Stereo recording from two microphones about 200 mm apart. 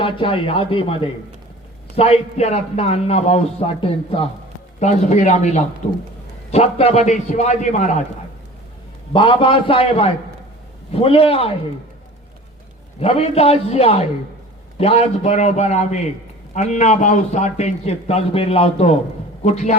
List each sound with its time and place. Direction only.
0.0 s a man's voice: 25° left (ahead or behind)
9.1 s a man's voice: 25° left (ahead or behind)
13.0 s a man's voice: 30° left (ahead or behind)